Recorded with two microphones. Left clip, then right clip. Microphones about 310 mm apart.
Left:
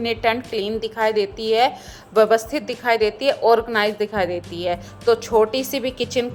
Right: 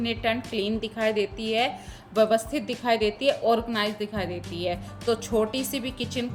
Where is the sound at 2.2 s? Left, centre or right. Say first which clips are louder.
Left 6 dB; left.